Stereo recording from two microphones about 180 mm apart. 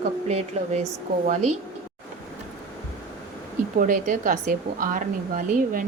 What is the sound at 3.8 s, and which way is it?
A woman's voice, 45° right (ahead or behind).